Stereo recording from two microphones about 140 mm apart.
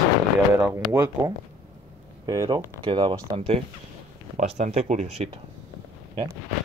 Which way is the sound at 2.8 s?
35° right (ahead or behind).